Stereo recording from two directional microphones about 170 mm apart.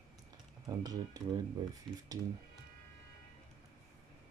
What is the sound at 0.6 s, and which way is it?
Speech, 20° right (ahead or behind).